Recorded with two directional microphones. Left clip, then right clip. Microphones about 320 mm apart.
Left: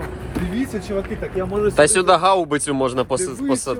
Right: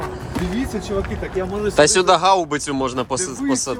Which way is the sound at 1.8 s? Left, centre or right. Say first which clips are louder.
Right 1 dB; centre.